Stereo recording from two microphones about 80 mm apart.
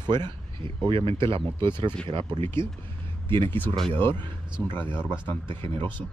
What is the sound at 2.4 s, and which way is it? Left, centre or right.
Speech, left.